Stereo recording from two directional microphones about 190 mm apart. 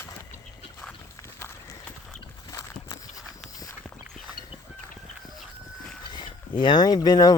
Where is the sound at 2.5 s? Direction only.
20° left (ahead or behind).